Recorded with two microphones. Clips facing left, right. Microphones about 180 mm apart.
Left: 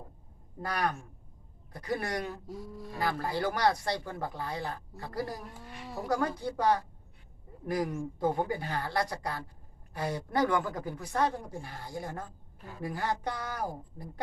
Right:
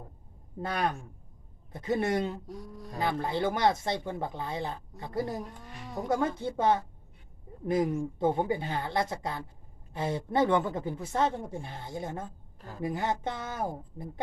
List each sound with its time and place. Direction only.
0.6 s speech: 25° right (ahead or behind)
2.5 s speech: centre (ahead or behind)
3.0 s speech: 25° right (ahead or behind)
5.5 s speech: 5° left (ahead or behind)
6.1 s speech: 25° right (ahead or behind)